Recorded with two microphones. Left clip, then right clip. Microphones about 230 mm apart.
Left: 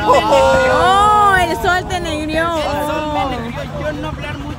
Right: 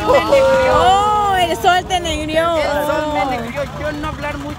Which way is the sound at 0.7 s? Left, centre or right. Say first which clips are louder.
Left 2 dB; centre.